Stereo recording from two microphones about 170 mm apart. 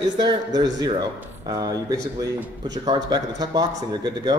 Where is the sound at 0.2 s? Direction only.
25° right (ahead or behind).